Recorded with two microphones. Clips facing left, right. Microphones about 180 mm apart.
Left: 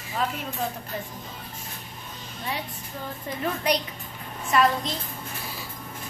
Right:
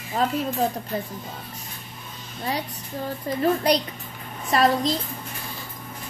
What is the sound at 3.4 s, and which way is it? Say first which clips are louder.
A child's voice: right 5 dB; 35° right (ahead or behind).